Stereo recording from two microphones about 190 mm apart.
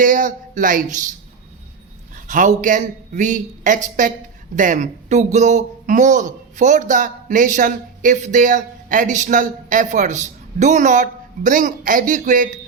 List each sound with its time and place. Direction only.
0.0 s speech: 45° right (ahead or behind)
2.1 s speech: 40° right (ahead or behind)